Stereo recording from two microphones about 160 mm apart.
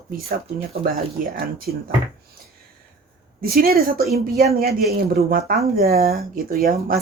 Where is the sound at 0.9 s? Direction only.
65° right (ahead or behind).